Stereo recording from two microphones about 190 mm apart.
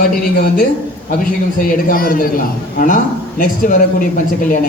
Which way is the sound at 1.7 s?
50° left (ahead or behind).